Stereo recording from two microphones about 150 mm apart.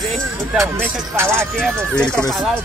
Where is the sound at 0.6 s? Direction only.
15° right (ahead or behind).